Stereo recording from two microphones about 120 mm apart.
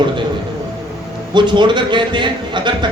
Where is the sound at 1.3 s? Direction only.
40° right (ahead or behind).